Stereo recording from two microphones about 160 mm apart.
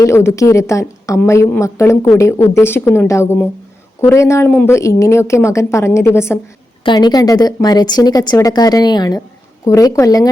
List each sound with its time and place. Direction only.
0.0 s a woman's voice: 15° left (ahead or behind)
6.8 s a woman's voice: 25° left (ahead or behind)